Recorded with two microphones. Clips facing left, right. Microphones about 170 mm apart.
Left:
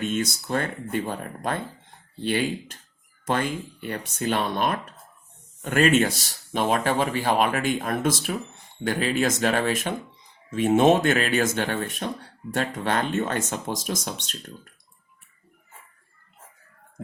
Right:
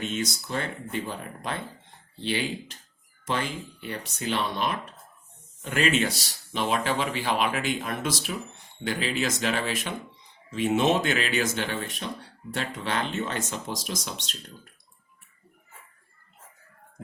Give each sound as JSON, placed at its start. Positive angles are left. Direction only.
{"t": 0.1, "sound": "speech", "side_deg": 50}